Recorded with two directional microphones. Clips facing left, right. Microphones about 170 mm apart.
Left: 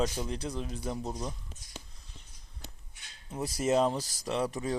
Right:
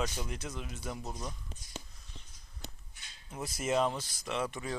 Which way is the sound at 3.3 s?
30° left (ahead or behind).